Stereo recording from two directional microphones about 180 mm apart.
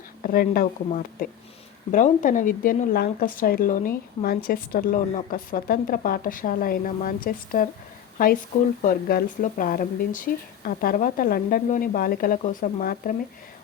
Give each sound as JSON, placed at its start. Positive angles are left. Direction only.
{"t": 0.2, "sound": "speech", "side_deg": 55}
{"t": 8.9, "sound": "speech", "side_deg": 55}